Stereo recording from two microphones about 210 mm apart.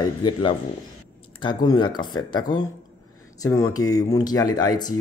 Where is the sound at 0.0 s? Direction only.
20° left (ahead or behind).